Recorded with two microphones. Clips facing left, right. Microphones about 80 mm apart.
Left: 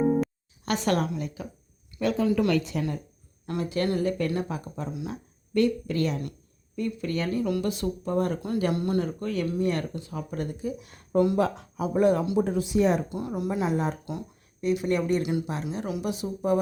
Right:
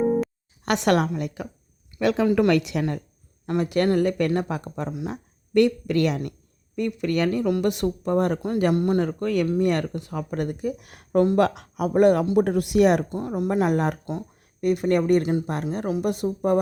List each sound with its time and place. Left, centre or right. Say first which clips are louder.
0.0 s music: right 2 dB; centre
0.6 s speech: right 5 dB; right
2.0 s speech: right 4 dB; right
2.2 s speech: right 4 dB; right
2.5 s a woman's voice: right 4 dB; right
3.4 s speech: right 6 dB; right
8.7 s speech: right 6 dB; right
9.0 s speech: right 5 dB; right
11.3 s speech: right 5 dB; right
13.1 s speech: right 4 dB; right
14.6 s speech: right 4 dB; right
15.5 s speech: right 5 dB; right